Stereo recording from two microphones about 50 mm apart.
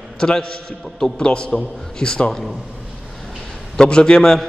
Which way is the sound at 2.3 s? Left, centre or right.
Centre.